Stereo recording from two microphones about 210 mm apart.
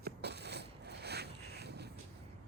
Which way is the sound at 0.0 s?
50° right (ahead or behind).